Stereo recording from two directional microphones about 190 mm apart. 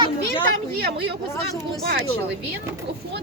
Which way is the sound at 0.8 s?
60° right (ahead or behind).